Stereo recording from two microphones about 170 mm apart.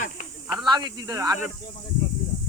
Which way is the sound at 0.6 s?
25° right (ahead or behind).